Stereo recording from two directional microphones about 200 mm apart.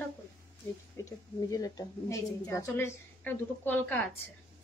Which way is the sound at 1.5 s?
15° left (ahead or behind).